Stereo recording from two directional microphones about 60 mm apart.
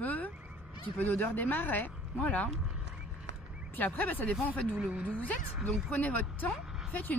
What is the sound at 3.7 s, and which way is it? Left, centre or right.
Speech, left.